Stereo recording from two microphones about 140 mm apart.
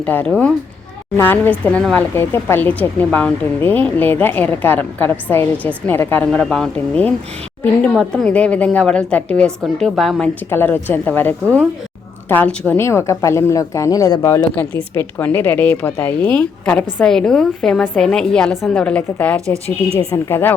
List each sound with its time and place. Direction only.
0.0 s speech: 10° left (ahead or behind)
10.5 s a woman's voice: 15° left (ahead or behind)
20.0 s a woman's voice: 25° left (ahead or behind)